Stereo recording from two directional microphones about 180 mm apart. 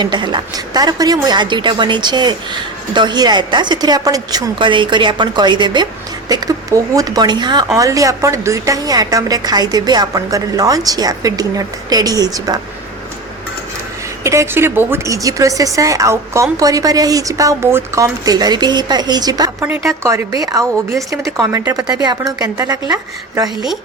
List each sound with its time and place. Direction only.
0.0 s a woman's voice: 25° right (ahead or behind)
14.3 s a woman's voice: 15° right (ahead or behind)
19.6 s a woman's voice: 10° right (ahead or behind)